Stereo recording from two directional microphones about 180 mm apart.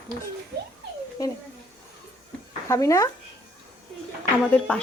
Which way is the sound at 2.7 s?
15° left (ahead or behind).